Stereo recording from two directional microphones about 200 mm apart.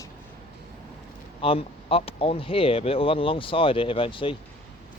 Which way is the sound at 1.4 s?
30° left (ahead or behind).